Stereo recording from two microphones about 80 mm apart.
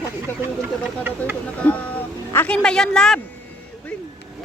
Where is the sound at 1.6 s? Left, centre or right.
Centre.